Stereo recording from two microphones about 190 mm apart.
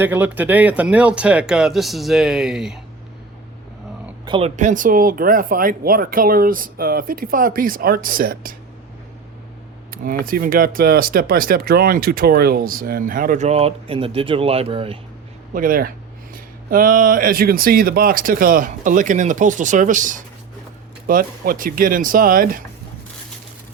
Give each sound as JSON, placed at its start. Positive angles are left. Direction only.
{"t": 0.0, "sound": "speech", "side_deg": -10}
{"t": 4.3, "sound": "speech", "side_deg": -30}
{"t": 9.9, "sound": "speech", "side_deg": -50}
{"t": 15.5, "sound": "speech", "side_deg": -45}